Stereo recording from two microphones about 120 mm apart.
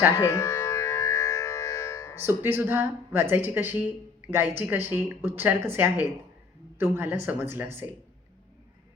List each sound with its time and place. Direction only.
0.2 s music: 25° left (ahead or behind)
2.2 s a woman's voice: 20° right (ahead or behind)